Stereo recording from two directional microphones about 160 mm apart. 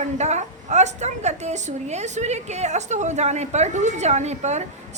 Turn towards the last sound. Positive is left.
turn(degrees=-45)  # may be behind; listen again after turning